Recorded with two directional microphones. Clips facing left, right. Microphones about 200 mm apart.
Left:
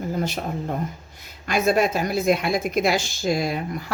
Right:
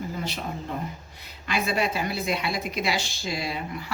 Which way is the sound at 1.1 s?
45° left (ahead or behind).